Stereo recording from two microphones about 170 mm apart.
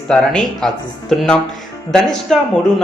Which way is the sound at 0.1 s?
5° left (ahead or behind).